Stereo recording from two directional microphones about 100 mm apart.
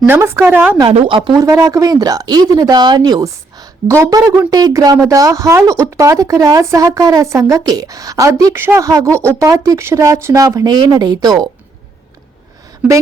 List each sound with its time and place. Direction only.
0.0 s a woman's voice: 25° right (ahead or behind)
0.9 s speech: 60° right (ahead or behind)
1.3 s a woman's voice: 35° right (ahead or behind)
3.8 s a woman's voice: 35° right (ahead or behind)